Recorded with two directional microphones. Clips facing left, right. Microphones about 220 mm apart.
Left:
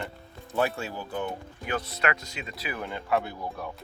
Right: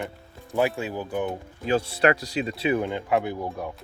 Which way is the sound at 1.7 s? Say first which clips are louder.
Right 8 dB; 30° right (ahead or behind).